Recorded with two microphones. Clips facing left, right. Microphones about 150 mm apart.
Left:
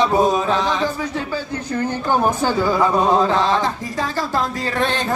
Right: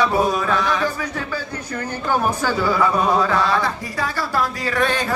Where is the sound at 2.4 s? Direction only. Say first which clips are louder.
Left 2 dB; 20° left (ahead or behind).